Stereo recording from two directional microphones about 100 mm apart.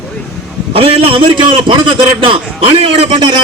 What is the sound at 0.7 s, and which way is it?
A man's voice, 70° right (ahead or behind).